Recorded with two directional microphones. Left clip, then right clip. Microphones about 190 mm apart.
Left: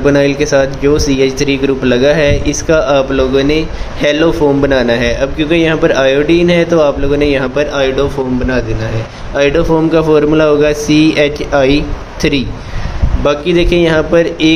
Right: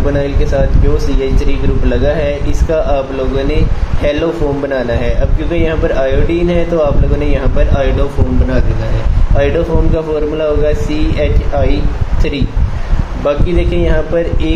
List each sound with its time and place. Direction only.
0.0 s speech: 40° left (ahead or behind)
9.9 s a man's voice: 45° left (ahead or behind)